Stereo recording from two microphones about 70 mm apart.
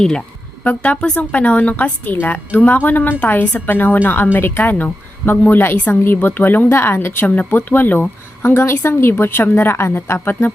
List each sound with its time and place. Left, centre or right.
0.6 s a woman's voice: left